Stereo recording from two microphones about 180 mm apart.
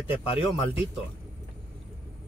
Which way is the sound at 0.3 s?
30° left (ahead or behind).